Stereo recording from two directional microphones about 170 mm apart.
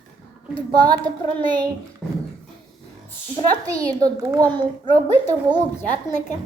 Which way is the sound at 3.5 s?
20° right (ahead or behind).